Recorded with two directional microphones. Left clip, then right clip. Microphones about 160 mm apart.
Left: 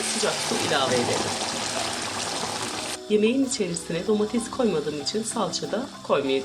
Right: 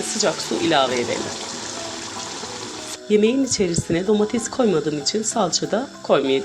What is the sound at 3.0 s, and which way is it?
Speech, 40° right (ahead or behind).